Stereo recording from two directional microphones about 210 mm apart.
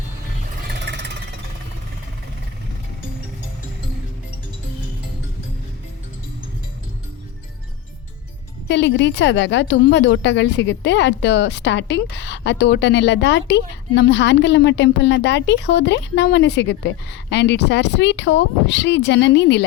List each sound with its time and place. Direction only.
0.7 s vehicle: 55° right (ahead or behind)
8.6 s a woman's voice: 55° left (ahead or behind)